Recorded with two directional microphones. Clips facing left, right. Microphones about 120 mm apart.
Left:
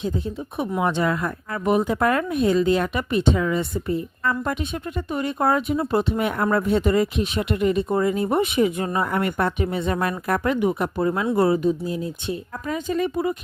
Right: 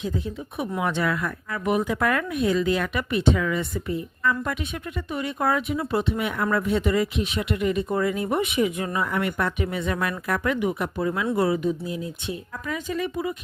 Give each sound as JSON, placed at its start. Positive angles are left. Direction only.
{"t": 0.8, "sound": "speech", "side_deg": 30}